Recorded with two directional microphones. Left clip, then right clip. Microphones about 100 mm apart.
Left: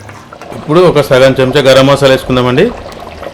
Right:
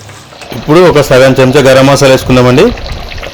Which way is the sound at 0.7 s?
70° right (ahead or behind).